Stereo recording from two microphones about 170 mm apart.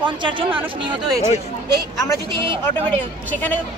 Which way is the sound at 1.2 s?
15° right (ahead or behind).